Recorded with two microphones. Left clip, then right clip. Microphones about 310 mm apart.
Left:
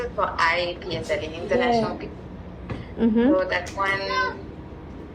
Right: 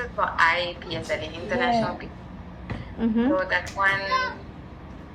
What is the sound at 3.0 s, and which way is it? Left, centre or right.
Speech, left.